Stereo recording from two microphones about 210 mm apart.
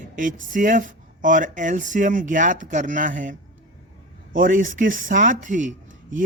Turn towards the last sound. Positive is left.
turn(degrees=-40)  # may be behind; listen again after turning